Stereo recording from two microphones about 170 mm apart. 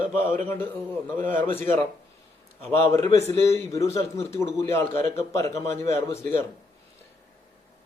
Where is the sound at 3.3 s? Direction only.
15° left (ahead or behind).